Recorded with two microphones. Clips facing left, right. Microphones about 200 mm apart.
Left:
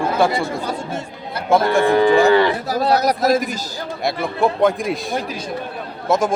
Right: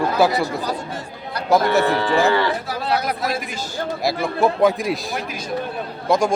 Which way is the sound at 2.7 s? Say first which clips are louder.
Left 6 dB; 40° left (ahead or behind).